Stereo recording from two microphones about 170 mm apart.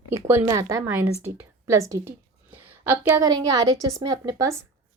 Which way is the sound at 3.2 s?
20° right (ahead or behind).